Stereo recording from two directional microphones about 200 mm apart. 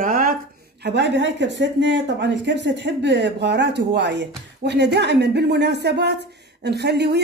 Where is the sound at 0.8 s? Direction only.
60° right (ahead or behind).